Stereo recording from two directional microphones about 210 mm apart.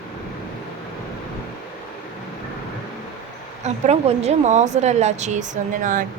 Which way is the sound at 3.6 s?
30° right (ahead or behind).